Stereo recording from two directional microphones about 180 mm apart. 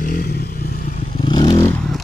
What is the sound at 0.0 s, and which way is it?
Motorcycle, 50° left (ahead or behind).